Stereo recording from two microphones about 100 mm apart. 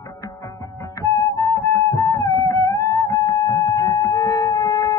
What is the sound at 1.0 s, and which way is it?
Music, 35° left (ahead or behind).